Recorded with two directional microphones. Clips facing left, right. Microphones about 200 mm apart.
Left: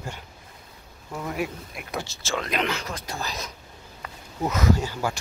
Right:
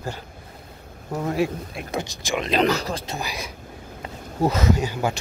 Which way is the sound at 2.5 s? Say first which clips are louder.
Right 10 dB; 35° right (ahead or behind).